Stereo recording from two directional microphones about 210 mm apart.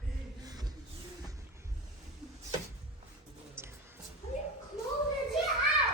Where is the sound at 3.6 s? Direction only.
10° right (ahead or behind).